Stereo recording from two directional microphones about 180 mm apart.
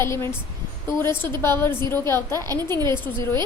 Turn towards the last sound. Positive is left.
turn(degrees=15)  # may be behind; listen again after turning